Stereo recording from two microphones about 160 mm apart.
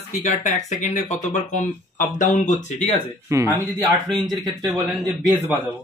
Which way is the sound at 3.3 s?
20° right (ahead or behind).